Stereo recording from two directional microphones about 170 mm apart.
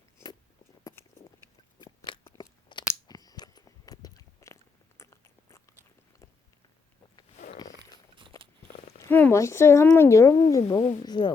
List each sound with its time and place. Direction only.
0.9 s biting: 20° left (ahead or behind)
1.8 s crunch: 25° left (ahead or behind)
3.1 s biting: 20° left (ahead or behind)
7.5 s a sound: 20° left (ahead or behind)
9.0 s speech: 10° left (ahead or behind)